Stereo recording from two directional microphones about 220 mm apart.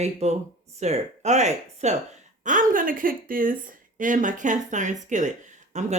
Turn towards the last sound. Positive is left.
turn(degrees=-30)  # may be behind; listen again after turning